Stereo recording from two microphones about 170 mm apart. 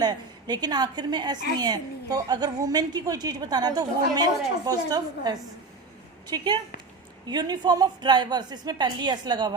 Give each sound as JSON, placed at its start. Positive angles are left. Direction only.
{"t": 0.0, "sound": "a woman's voice", "side_deg": -25}